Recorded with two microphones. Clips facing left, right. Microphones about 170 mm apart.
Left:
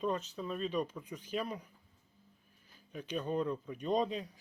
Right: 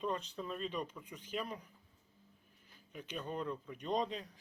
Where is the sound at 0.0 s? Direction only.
10° left (ahead or behind).